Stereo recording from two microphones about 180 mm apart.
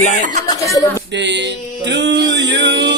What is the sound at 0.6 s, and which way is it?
Speech, 20° left (ahead or behind).